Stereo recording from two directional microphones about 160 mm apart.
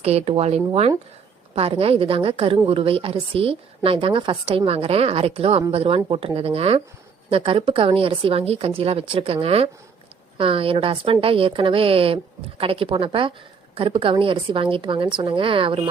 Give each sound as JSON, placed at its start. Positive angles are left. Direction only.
{"t": 0.0, "sound": "a woman's voice", "side_deg": -40}